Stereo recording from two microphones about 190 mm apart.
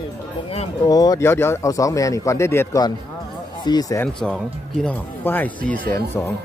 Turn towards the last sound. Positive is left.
turn(degrees=10)  # may be behind; listen again after turning